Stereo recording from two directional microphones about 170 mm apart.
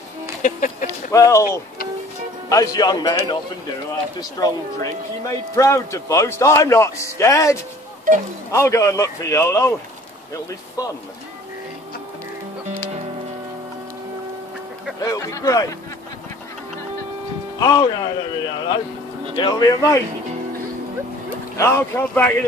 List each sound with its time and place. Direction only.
0.4 s music: 50° left (ahead or behind)
1.1 s a man's voice: 20° left (ahead or behind)
2.5 s speech: 20° left (ahead or behind)
5.6 s a man's voice: 15° left (ahead or behind)
10.8 s speech: 20° left (ahead or behind)
15.0 s speech: 20° left (ahead or behind)
17.6 s speech: 25° left (ahead or behind)
21.5 s a man's voice: 15° left (ahead or behind)